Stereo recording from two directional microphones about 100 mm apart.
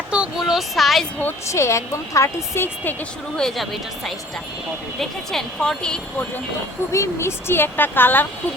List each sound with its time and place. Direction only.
0.1 s speech: 5° right (ahead or behind)
1.5 s speech: 30° left (ahead or behind)
3.3 s speech: 5° left (ahead or behind)
6.9 s speech: 30° left (ahead or behind)